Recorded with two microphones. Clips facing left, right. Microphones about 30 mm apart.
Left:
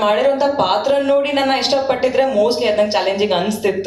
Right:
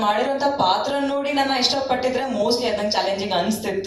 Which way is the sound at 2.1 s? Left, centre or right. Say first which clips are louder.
Left 8 dB; left.